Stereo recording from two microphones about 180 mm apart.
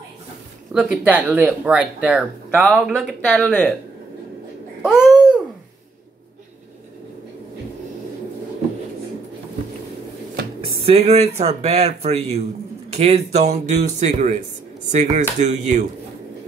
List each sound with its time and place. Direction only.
0.7 s speech: 5° right (ahead or behind)
5.0 s babbling: 5° right (ahead or behind)
10.6 s speech: 35° right (ahead or behind)